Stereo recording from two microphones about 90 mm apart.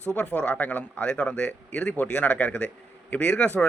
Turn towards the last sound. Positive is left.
turn(degrees=10)  # may be behind; listen again after turning